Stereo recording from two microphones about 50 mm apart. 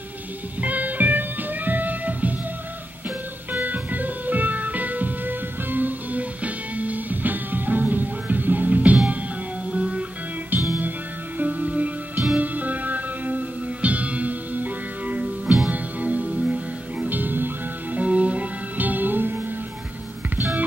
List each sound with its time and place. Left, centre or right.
0.6 s music: right
3.5 s music: right
10.5 s music: right
17.1 s music: right
17.9 s music: right